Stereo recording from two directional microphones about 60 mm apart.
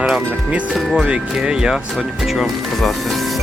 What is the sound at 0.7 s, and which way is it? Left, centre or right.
Speech, centre.